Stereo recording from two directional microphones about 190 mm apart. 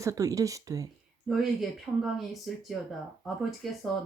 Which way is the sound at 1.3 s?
Centre (ahead or behind).